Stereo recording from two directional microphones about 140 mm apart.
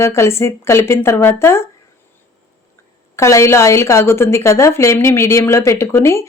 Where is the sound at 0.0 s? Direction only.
20° left (ahead or behind).